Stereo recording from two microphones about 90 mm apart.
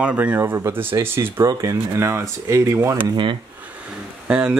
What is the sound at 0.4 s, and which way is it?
Speech, 25° right (ahead or behind).